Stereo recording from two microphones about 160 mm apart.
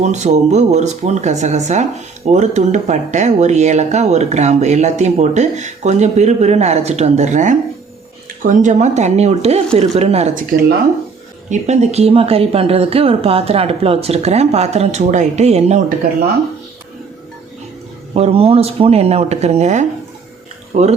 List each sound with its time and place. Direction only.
0.0 s speech: 45° right (ahead or behind)
11.4 s speech: 45° right (ahead or behind)
18.1 s speech: 40° right (ahead or behind)